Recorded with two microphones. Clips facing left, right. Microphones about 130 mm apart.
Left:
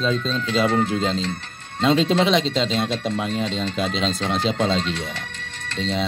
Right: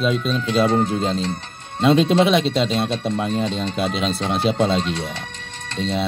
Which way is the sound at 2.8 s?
25° right (ahead or behind).